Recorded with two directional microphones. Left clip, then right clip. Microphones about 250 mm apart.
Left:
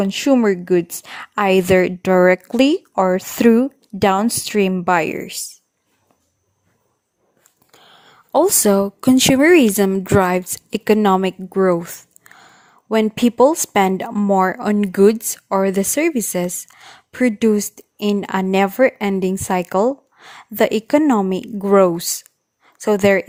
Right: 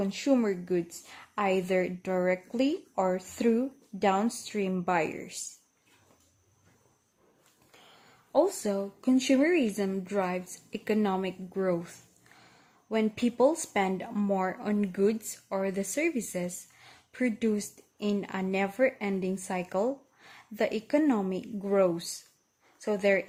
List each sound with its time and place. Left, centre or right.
0.0 s speech: left
7.7 s speech: left